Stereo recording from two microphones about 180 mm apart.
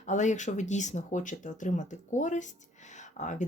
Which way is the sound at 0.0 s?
40° left (ahead or behind).